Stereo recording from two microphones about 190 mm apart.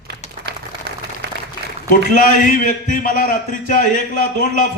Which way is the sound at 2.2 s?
45° left (ahead or behind).